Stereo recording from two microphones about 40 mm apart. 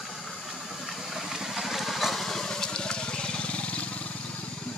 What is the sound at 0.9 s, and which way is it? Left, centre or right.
Vehicle, centre.